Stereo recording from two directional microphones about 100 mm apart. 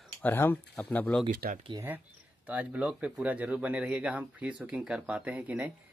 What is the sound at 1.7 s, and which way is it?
Speech, 45° right (ahead or behind).